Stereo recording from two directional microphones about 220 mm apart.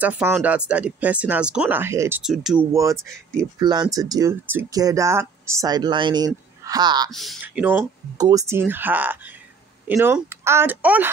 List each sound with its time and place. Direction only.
0.0 s speech: 10° right (ahead or behind)
2.7 s speech: 15° right (ahead or behind)
7.2 s speech: centre (ahead or behind)